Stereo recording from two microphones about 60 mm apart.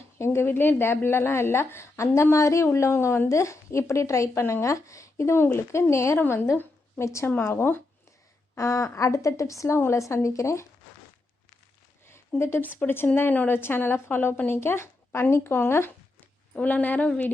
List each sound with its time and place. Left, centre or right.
0.2 s a woman's voice: left
2.6 s a woman's voice: left
7.3 s a woman's voice: left
8.5 s a woman's voice: left
12.4 s a woman's voice: left
16.6 s speech: left